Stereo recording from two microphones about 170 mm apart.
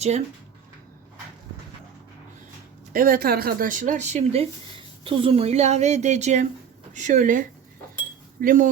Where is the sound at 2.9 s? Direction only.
60° right (ahead or behind); by 4.4 s 45° right (ahead or behind).